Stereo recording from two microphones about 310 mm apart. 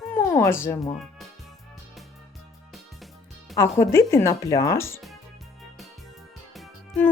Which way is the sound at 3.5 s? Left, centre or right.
Centre.